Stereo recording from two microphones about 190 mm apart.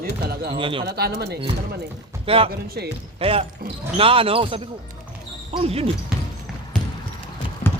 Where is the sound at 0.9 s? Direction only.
55° right (ahead or behind).